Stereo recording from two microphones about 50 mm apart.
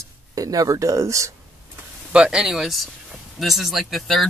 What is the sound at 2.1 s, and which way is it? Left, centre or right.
Speech, centre.